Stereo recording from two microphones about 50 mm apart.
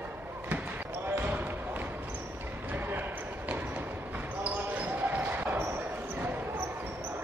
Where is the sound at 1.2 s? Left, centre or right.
Right.